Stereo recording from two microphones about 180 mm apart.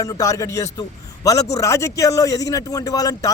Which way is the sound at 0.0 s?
20° left (ahead or behind).